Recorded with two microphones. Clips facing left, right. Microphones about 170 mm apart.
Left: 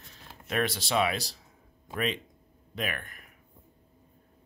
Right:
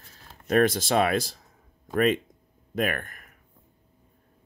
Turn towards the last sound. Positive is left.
turn(degrees=-50)  # may be behind; listen again after turning